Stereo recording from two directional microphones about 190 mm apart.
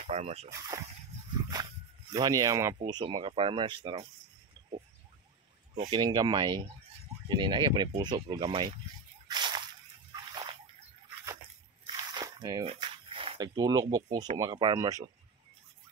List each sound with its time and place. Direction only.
0.0 s speech: 35° right (ahead or behind)
0.5 s speech: 15° right (ahead or behind)
2.1 s speech: 20° right (ahead or behind)
5.9 s speech: 25° right (ahead or behind)
9.3 s slosh: 25° right (ahead or behind)
10.1 s splash: 20° right (ahead or behind)
11.8 s biting: 25° right (ahead or behind)
12.6 s speech: 25° right (ahead or behind)